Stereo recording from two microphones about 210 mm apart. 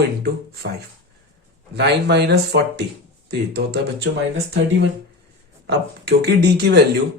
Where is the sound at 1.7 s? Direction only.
55° right (ahead or behind).